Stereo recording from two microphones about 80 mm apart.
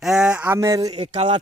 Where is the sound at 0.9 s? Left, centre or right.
Right.